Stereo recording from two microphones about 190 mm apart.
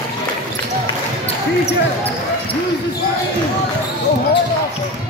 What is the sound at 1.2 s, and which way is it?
Basketball bounce, 30° left (ahead or behind).